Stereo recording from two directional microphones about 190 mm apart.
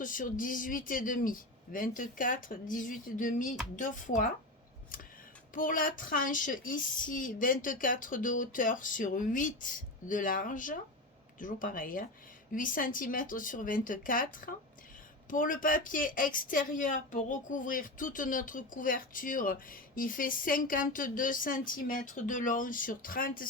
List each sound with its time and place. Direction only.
0.0 s speech: 45° left (ahead or behind)
5.5 s speech: 45° left (ahead or behind)